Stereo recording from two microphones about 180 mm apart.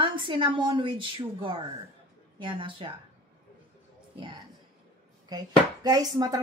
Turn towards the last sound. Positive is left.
turn(degrees=-20)  # may be behind; listen again after turning